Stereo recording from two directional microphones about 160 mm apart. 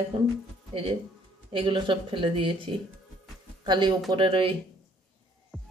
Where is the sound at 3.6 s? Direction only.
30° right (ahead or behind).